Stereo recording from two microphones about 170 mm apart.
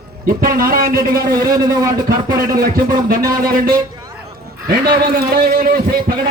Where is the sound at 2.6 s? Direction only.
55° right (ahead or behind).